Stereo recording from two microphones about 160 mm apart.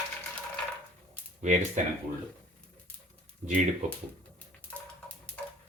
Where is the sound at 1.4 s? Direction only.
50° right (ahead or behind).